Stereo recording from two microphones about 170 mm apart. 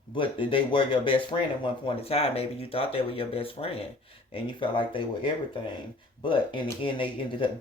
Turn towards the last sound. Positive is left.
turn(degrees=30)  # may be behind; listen again after turning